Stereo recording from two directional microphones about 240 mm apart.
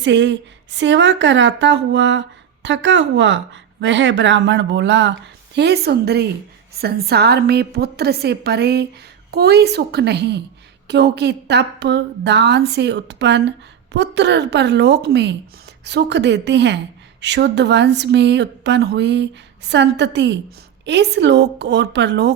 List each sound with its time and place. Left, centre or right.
0.0 s a woman's voice: right